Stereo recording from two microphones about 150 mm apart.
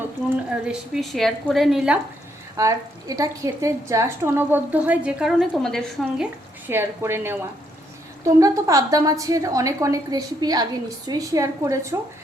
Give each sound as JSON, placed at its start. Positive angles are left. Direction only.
{"t": 0.6, "sound": "a woman's voice", "side_deg": 0}
{"t": 2.6, "sound": "a woman's voice", "side_deg": -20}
{"t": 6.7, "sound": "a woman's voice", "side_deg": -15}
{"t": 8.4, "sound": "a woman's voice", "side_deg": -20}